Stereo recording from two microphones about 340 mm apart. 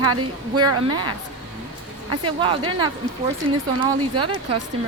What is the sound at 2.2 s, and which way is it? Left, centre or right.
Speech, centre.